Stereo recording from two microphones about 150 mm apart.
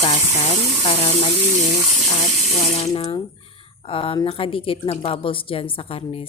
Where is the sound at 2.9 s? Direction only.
25° left (ahead or behind).